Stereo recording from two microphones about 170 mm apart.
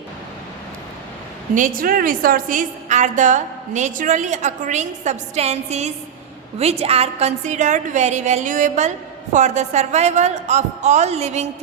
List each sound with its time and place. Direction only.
1.5 s a woman's voice: 55° right (ahead or behind)